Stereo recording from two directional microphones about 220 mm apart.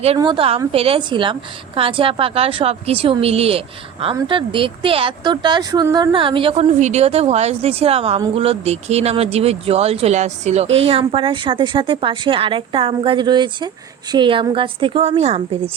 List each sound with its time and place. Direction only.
0.2 s speech: 25° right (ahead or behind)